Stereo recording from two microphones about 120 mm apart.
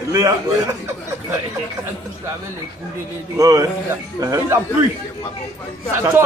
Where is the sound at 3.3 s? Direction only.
30° right (ahead or behind).